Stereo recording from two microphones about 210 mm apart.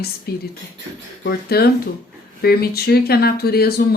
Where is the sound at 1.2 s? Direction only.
50° left (ahead or behind).